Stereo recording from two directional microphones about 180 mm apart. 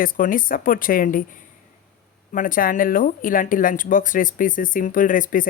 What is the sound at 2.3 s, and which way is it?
Speech, 50° left (ahead or behind).